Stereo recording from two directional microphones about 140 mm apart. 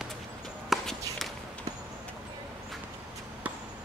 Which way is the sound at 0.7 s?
Centre (ahead or behind).